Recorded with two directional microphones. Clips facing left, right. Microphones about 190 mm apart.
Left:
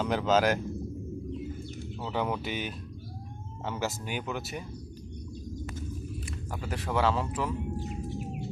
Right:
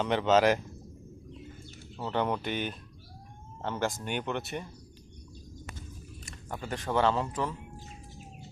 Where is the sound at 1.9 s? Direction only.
5° left (ahead or behind).